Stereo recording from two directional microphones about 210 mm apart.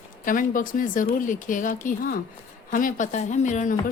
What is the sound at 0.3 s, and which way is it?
A woman's voice, 40° left (ahead or behind).